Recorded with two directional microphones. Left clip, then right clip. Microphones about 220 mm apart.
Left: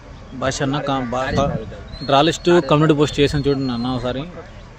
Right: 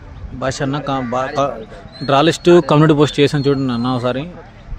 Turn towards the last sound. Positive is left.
turn(degrees=-25)  # may be behind; listen again after turning